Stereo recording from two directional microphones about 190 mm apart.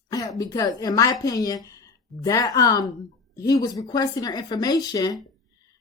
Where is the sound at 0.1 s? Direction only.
20° left (ahead or behind).